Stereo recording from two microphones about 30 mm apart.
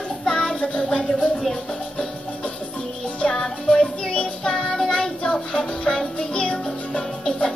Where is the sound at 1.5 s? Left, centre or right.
Left.